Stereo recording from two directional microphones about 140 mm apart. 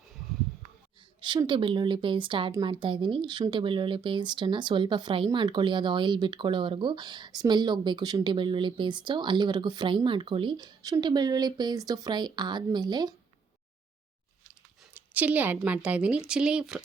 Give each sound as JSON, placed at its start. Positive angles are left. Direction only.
{"t": 1.2, "sound": "speech", "side_deg": -35}
{"t": 14.9, "sound": "a woman's voice", "side_deg": -10}